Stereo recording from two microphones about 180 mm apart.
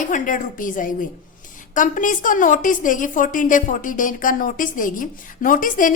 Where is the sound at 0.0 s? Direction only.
45° left (ahead or behind).